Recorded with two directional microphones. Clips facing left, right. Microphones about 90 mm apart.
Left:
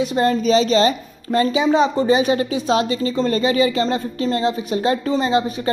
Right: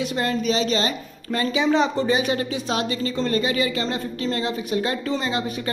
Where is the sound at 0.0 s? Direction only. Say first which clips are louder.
Left 6 dB; 25° left (ahead or behind).